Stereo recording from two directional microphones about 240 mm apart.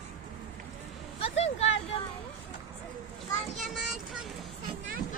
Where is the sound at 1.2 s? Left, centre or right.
Left.